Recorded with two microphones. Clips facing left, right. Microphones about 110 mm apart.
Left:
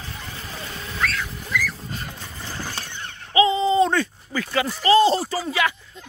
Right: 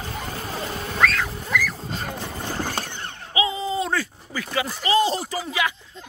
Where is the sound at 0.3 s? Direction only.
40° right (ahead or behind).